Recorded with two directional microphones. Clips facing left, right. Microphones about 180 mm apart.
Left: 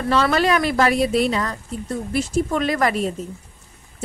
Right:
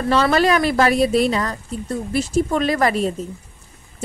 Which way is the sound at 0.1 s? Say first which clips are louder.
Right 2 dB; 35° right (ahead or behind).